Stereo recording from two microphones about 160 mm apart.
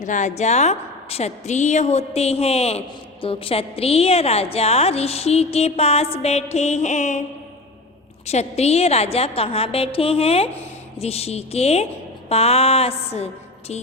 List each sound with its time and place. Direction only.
0.0 s speech: 50° left (ahead or behind)
8.3 s speech: 40° left (ahead or behind)